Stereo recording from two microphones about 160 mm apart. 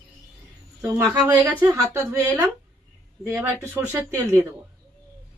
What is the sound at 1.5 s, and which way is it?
Speech, 20° right (ahead or behind).